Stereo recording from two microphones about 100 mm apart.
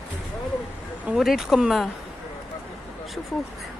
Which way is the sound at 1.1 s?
5° right (ahead or behind).